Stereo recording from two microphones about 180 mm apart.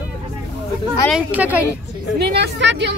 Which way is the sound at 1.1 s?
10° right (ahead or behind).